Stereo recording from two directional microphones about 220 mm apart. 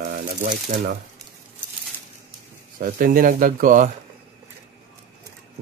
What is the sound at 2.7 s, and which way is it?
Speech, 40° right (ahead or behind).